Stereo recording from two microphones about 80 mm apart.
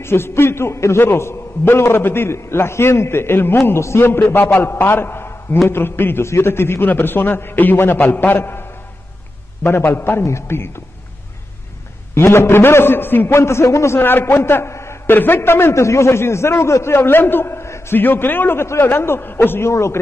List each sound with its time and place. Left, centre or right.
0.0 s a man's voice: left
12.1 s a man's voice: left